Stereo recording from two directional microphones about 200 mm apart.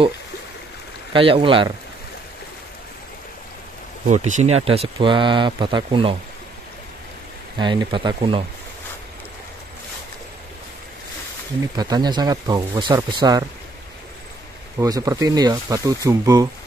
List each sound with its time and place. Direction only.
1.1 s speech: 25° right (ahead or behind)
4.1 s speech: 35° right (ahead or behind)
7.5 s speech: 25° right (ahead or behind)
11.7 s speech: 20° right (ahead or behind)
14.8 s speech: 15° right (ahead or behind)